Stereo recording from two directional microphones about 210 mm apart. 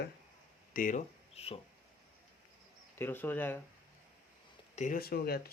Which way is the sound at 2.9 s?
10° left (ahead or behind).